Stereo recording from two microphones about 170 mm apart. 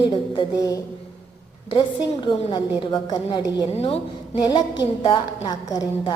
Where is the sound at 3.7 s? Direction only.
35° left (ahead or behind).